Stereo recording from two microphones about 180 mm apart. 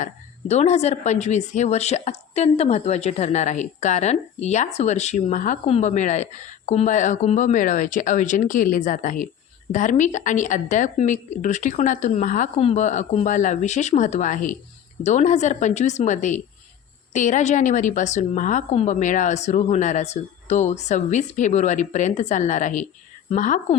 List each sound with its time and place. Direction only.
0.0 s a woman's voice: 40° left (ahead or behind)